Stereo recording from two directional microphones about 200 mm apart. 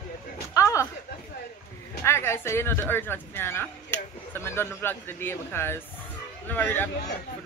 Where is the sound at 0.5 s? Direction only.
15° left (ahead or behind).